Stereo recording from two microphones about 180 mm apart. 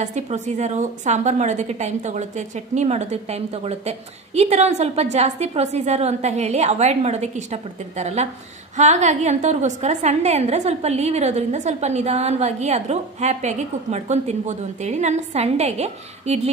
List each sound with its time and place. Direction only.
0.0 s a woman's voice: 40° right (ahead or behind)